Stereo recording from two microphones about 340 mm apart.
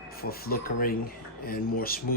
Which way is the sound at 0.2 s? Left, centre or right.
Left.